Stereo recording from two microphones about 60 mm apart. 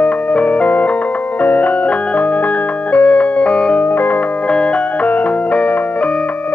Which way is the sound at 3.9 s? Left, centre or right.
Left.